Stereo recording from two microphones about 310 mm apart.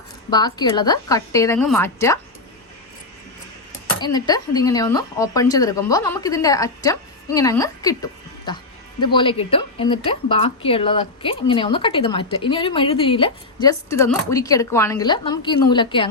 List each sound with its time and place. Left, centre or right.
0.3 s a woman's voice: centre
4.0 s a woman's voice: centre